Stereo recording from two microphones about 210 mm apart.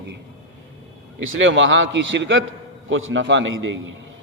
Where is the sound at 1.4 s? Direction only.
65° right (ahead or behind).